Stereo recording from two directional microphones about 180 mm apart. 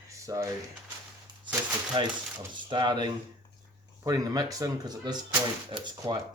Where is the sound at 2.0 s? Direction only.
25° right (ahead or behind).